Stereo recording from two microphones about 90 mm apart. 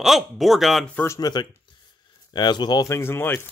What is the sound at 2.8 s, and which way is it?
Speech, 30° left (ahead or behind).